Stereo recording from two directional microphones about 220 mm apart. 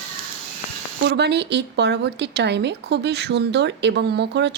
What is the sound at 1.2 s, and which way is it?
A woman's voice, 50° right (ahead or behind).